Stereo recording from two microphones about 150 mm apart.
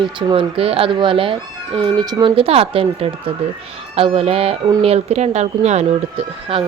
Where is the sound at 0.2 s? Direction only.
35° right (ahead or behind).